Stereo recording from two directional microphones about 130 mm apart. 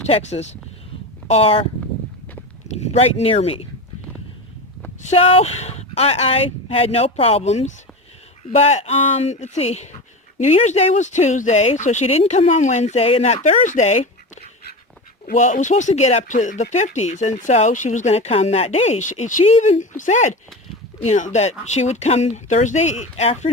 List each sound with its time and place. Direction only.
0.1 s speech: 55° left (ahead or behind)
2.6 s speech: 60° left (ahead or behind)
5.0 s speech: 50° left (ahead or behind)
15.3 s speech: 75° left (ahead or behind); by 23.5 s 55° left (ahead or behind)